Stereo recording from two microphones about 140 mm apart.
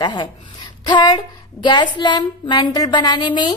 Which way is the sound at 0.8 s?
30° left (ahead or behind).